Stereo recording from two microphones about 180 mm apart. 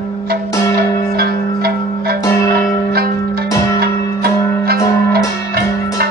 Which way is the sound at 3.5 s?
15° left (ahead or behind).